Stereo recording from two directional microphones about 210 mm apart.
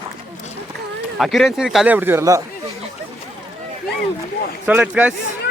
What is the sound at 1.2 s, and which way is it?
Speech, centre (ahead or behind).